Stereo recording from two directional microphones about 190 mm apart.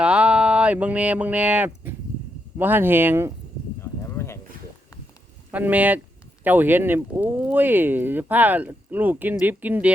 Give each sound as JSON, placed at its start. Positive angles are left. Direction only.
{"t": 0.0, "sound": "speech", "side_deg": -5}
{"t": 5.5, "sound": "speech", "side_deg": -10}